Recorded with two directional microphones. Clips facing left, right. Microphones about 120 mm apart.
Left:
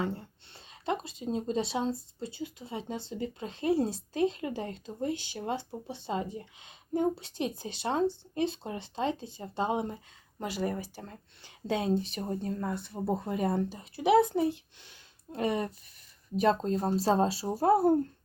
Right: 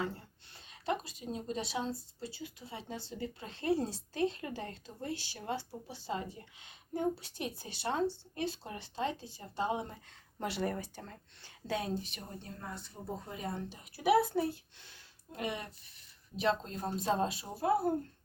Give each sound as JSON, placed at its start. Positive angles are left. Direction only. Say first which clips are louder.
{"t": 0.0, "sound": "speech", "louder": "left 5 dB", "side_deg": 25}
{"t": 10.4, "sound": "speech", "louder": "left 3 dB", "side_deg": 0}
{"t": 10.9, "sound": "speech", "louder": "left 3 dB", "side_deg": 15}
{"t": 12.1, "sound": "speech", "louder": "left 13 dB", "side_deg": 40}
{"t": 12.5, "sound": "speech", "louder": "left 11 dB", "side_deg": 60}
{"t": 13.7, "sound": "speech", "louder": "right 1 dB", "side_deg": 30}
{"t": 15.3, "sound": "speech", "louder": "left 8 dB", "side_deg": 35}